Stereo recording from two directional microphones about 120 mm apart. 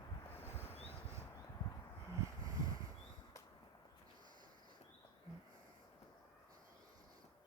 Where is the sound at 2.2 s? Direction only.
30° right (ahead or behind).